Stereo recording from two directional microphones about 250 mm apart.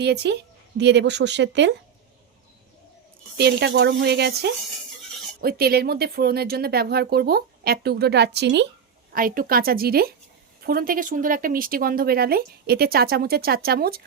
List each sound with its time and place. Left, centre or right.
0.0 s speech: right
3.3 s speech: right